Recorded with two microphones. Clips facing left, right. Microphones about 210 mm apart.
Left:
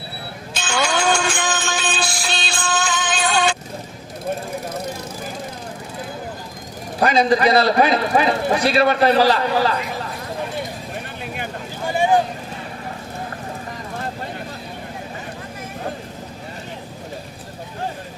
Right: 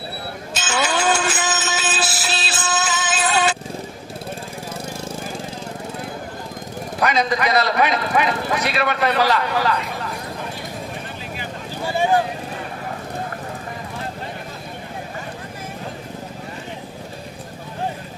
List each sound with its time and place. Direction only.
0.5 s music: 5° right (ahead or behind)
7.0 s a man's voice: 30° left (ahead or behind)
11.9 s vehicle: 15° left (ahead or behind)